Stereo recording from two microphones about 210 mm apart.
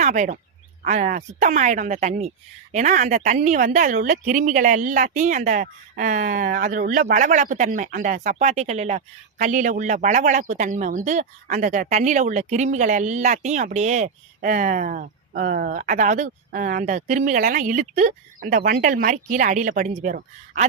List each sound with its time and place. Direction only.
0.0 s speech: 35° right (ahead or behind)